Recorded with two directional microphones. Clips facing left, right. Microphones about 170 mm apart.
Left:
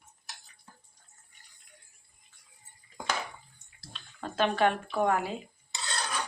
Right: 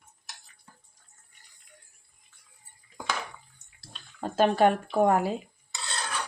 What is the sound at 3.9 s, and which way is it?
Speech, 40° right (ahead or behind).